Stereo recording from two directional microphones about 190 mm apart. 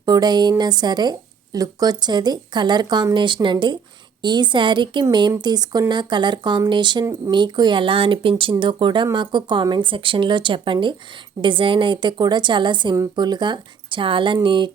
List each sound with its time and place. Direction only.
0.0 s speech: 20° right (ahead or behind)